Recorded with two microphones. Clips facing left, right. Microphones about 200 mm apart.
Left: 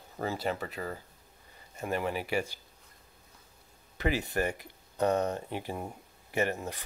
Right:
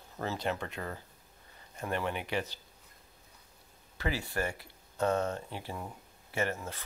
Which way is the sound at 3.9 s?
20° left (ahead or behind).